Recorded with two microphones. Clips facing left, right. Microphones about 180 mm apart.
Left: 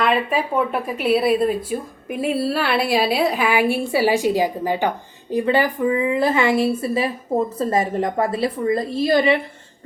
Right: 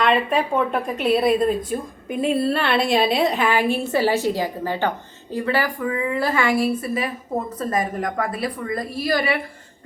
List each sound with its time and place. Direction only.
0.0 s a woman's voice: 5° left (ahead or behind); by 9.4 s 25° left (ahead or behind)